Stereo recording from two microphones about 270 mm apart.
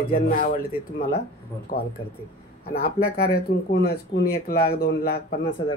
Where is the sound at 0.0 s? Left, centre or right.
Left.